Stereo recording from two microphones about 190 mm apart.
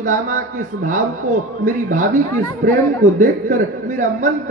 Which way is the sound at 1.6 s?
45° right (ahead or behind).